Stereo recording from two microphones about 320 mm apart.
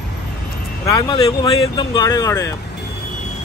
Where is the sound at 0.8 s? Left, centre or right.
Centre.